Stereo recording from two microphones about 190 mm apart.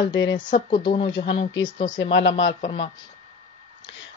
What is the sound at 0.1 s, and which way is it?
Speech, 70° left (ahead or behind).